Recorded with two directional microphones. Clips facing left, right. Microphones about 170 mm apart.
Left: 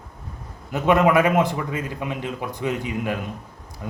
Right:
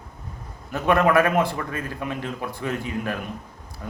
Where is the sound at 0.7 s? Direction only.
20° left (ahead or behind).